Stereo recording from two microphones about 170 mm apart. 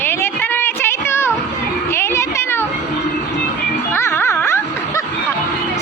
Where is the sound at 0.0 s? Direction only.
15° left (ahead or behind).